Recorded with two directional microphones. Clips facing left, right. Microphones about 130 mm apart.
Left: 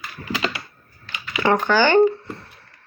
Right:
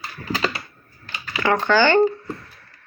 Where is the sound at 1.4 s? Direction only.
15° left (ahead or behind).